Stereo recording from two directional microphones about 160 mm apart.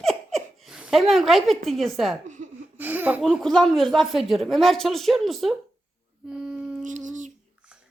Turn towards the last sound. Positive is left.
turn(degrees=-50)  # may be behind; listen again after turning